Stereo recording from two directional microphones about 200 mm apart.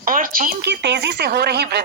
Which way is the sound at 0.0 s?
45° right (ahead or behind).